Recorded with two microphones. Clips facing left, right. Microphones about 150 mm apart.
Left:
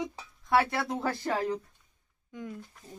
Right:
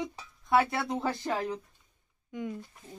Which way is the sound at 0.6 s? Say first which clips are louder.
Even; 30° right (ahead or behind).